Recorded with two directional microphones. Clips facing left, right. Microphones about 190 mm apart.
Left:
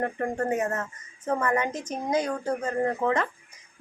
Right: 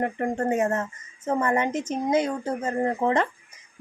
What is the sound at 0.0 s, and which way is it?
A woman's voice, 25° right (ahead or behind).